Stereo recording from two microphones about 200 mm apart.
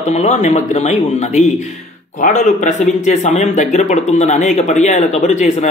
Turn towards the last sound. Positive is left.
turn(degrees=35)  # may be behind; listen again after turning